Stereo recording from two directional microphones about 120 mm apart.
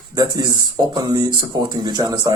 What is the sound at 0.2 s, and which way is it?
A man's voice, 35° right (ahead or behind).